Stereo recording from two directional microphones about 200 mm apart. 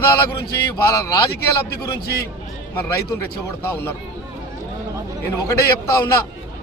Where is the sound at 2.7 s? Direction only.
10° left (ahead or behind).